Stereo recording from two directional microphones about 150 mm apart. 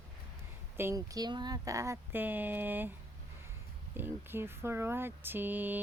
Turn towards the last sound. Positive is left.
turn(degrees=-10)  # may be behind; listen again after turning